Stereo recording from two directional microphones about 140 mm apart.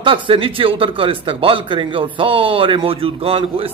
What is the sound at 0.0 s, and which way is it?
Speech, 40° right (ahead or behind).